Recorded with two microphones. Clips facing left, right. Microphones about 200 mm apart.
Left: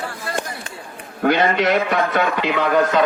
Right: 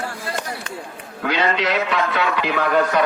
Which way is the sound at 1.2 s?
50° left (ahead or behind).